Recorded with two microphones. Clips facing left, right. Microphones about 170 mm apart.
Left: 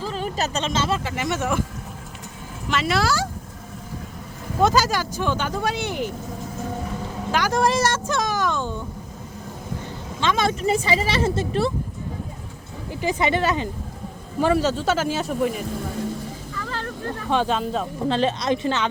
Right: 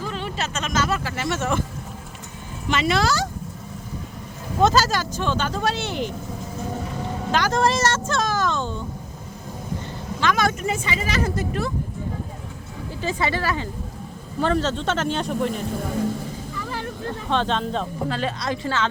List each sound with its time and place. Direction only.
0.0 s speech: 40° left (ahead or behind); by 1.6 s 10° left (ahead or behind)
2.6 s speech: centre (ahead or behind)
4.6 s speech: 10° left (ahead or behind)
7.3 s speech: 10° left (ahead or behind)
10.2 s speech: 25° left (ahead or behind)
12.9 s speech: 15° left (ahead or behind)
14.4 s speech: 10° left (ahead or behind)
16.6 s a sound: 15° right (ahead or behind)
17.2 s speech: 10° left (ahead or behind)
18.1 s speech: 25° left (ahead or behind)